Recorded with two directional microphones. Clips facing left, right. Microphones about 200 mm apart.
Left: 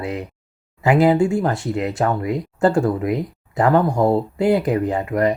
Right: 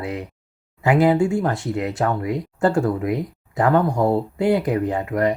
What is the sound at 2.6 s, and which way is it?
Speech, 30° left (ahead or behind).